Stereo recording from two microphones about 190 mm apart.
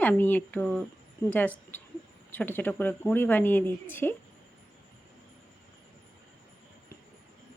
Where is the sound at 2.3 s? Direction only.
10° left (ahead or behind).